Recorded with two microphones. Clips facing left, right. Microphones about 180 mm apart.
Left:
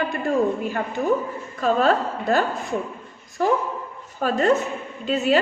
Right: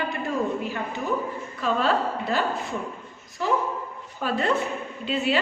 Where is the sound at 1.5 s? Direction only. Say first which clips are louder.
Left 5 dB; 45° left (ahead or behind).